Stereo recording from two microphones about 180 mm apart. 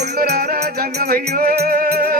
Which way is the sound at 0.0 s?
60° right (ahead or behind).